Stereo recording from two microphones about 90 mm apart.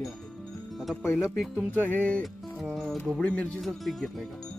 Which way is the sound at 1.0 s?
25° left (ahead or behind).